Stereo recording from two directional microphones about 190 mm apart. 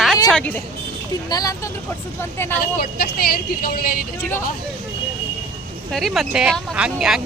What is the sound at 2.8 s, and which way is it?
Speech, 55° left (ahead or behind).